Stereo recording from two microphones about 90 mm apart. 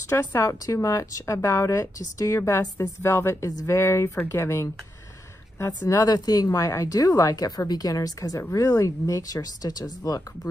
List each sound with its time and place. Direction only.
0.0 s a woman's voice: 30° left (ahead or behind)
5.9 s a woman's voice: 40° left (ahead or behind)